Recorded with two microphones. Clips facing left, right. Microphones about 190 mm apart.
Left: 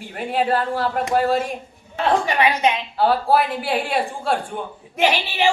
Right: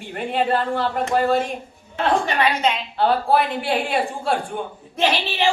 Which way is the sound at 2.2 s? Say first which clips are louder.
Left 1 dB; 15° left (ahead or behind).